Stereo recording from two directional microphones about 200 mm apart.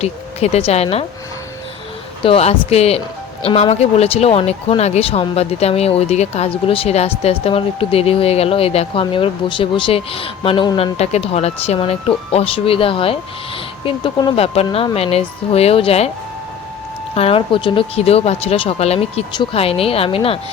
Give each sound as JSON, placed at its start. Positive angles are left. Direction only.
{"t": 0.0, "sound": "speech", "side_deg": 30}
{"t": 2.2, "sound": "speech", "side_deg": 30}
{"t": 17.2, "sound": "speech", "side_deg": 30}